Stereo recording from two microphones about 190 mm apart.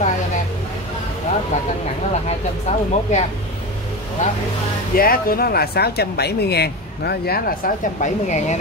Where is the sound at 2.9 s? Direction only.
35° left (ahead or behind).